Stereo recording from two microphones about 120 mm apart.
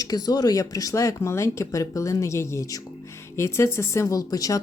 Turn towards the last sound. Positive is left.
turn(degrees=30)  # may be behind; listen again after turning